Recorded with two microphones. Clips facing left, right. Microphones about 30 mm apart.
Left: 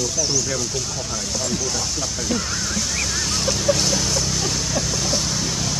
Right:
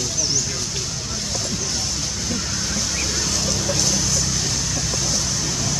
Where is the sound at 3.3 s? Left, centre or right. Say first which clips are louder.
Left 3 dB; centre.